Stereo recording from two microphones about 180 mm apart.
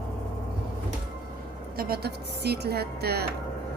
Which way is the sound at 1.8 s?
60° right (ahead or behind).